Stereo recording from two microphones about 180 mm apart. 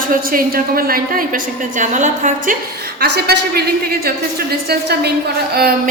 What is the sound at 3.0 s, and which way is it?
A woman's voice, 65° right (ahead or behind).